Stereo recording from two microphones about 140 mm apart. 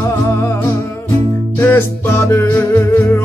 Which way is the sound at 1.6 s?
15° left (ahead or behind).